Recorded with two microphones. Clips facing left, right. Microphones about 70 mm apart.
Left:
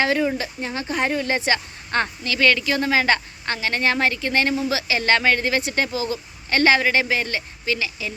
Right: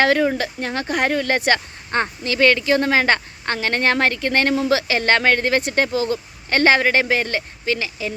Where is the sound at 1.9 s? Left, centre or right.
Right.